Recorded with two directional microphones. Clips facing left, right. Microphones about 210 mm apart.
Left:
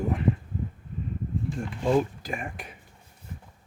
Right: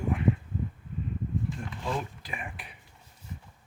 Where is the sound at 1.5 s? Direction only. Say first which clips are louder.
Left 10 dB; 45° left (ahead or behind).